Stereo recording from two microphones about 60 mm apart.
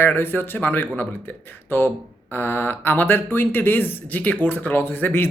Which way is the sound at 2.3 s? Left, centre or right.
Left.